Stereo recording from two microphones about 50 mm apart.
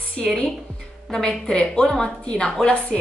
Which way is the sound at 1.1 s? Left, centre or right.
Centre.